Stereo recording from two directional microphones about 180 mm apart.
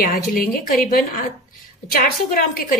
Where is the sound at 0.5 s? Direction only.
50° left (ahead or behind).